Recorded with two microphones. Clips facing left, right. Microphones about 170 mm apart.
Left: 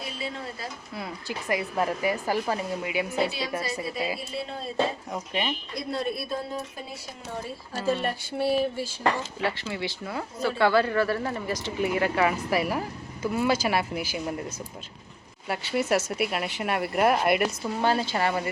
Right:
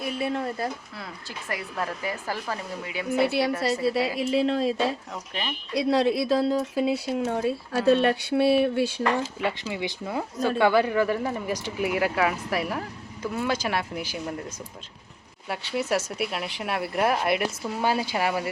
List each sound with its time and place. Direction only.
0.0 s speech: 55° right (ahead or behind)
1.5 s speech: 20° left (ahead or behind)
3.2 s a woman's voice: 65° right (ahead or behind)
4.2 s speech: 90° right
5.3 s speech: 10° left (ahead or behind)
5.7 s speech: 85° right; by 9.0 s 70° right (ahead or behind)
9.4 s speech: 15° right (ahead or behind); by 14.3 s 5° left (ahead or behind)
15.4 s speech: centre (ahead or behind)